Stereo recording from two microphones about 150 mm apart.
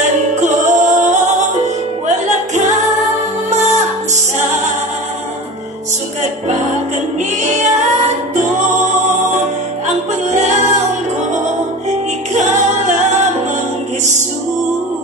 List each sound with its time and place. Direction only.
0.0 s music: 55° right (ahead or behind)
7.4 s music: 50° right (ahead or behind)
9.8 s music: 50° right (ahead or behind)
11.9 s music: 50° right (ahead or behind)